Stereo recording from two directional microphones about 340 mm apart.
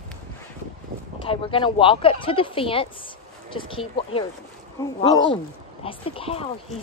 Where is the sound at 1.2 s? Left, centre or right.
Centre.